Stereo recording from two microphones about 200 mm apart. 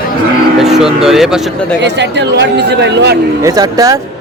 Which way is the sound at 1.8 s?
60° right (ahead or behind).